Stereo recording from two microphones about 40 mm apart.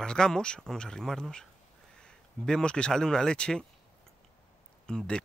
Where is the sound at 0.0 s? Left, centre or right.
Centre.